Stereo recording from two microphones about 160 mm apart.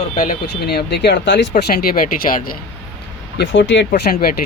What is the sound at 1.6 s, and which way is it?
Speech, 70° left (ahead or behind).